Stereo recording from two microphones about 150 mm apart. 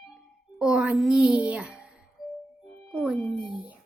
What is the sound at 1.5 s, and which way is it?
Music, 5° right (ahead or behind).